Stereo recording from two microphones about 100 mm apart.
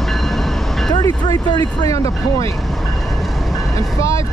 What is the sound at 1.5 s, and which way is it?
Speech, 45° left (ahead or behind).